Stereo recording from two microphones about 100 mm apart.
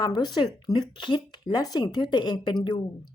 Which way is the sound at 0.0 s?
45° left (ahead or behind).